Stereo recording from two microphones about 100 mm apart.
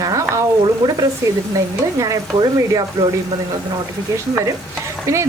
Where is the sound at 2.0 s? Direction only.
35° right (ahead or behind).